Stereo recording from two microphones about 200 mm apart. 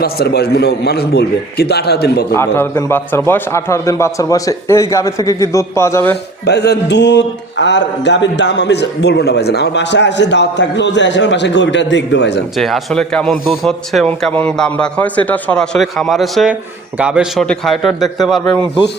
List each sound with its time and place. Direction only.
0.0 s a man's voice: 50° left (ahead or behind)
2.3 s a man's voice: 10° left (ahead or behind)
6.4 s speech: 55° left (ahead or behind)
12.5 s a man's voice: centre (ahead or behind)